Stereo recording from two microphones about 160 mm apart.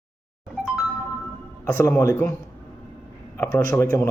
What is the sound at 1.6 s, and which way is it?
Speech, 15° left (ahead or behind).